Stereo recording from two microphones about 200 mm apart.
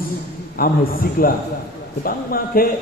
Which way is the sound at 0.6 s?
45° left (ahead or behind).